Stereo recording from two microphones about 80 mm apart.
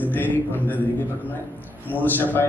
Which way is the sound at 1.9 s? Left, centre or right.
Left.